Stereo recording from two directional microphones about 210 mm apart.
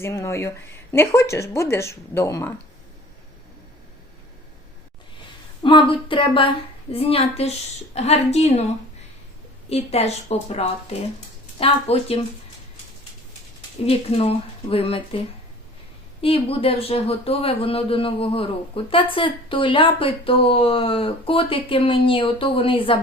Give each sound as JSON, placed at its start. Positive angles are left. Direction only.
{"t": 0.0, "sound": "speech", "side_deg": 15}
{"t": 5.6, "sound": "a woman's voice", "side_deg": 25}
{"t": 9.6, "sound": "speech", "side_deg": 30}
{"t": 13.8, "sound": "speech", "side_deg": 25}
{"t": 16.2, "sound": "speech", "side_deg": 25}